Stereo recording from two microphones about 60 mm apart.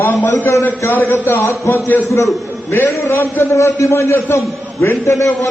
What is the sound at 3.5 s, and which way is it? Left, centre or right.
A man's voice, left.